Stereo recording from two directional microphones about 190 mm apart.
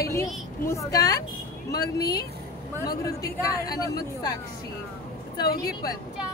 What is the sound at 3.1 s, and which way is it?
Speech, 20° left (ahead or behind).